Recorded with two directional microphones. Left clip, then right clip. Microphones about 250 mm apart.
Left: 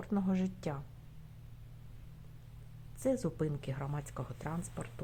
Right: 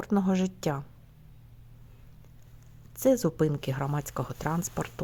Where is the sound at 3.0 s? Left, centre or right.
Right.